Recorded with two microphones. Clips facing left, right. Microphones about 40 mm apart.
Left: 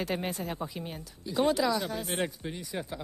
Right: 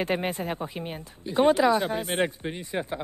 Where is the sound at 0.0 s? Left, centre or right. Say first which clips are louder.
Right 5 dB; right.